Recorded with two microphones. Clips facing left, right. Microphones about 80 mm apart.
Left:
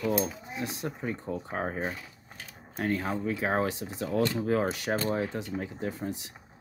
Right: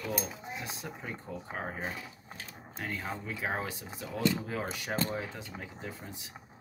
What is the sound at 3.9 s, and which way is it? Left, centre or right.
Speech, left.